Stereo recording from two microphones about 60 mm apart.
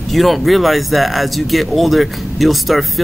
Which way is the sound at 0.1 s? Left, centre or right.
Centre.